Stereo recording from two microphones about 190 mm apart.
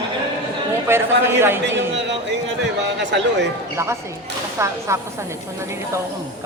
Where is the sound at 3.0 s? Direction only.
65° right (ahead or behind).